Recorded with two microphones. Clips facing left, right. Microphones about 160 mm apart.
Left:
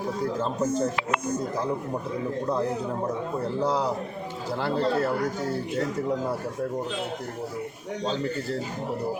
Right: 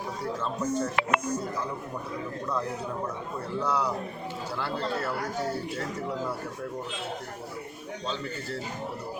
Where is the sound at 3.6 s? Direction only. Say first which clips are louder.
Left 2 dB; 30° left (ahead or behind).